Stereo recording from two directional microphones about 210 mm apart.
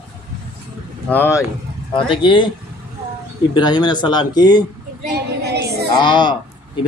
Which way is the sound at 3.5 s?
20° left (ahead or behind).